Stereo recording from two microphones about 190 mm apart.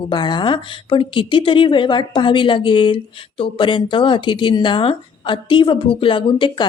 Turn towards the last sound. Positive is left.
turn(degrees=25)  # may be behind; listen again after turning